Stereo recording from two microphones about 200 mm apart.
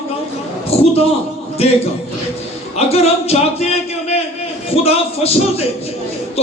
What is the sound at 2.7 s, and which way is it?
Speech, 30° left (ahead or behind).